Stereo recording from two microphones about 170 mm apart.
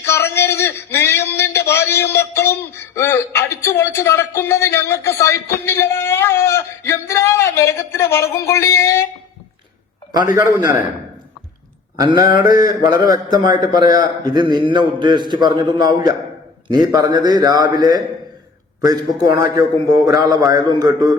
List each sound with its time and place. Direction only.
0.0 s a sound: 15° left (ahead or behind)
10.3 s a man's voice: 20° right (ahead or behind)
12.1 s a man's voice: 60° left (ahead or behind)
13.1 s a man's voice: 25° right (ahead or behind)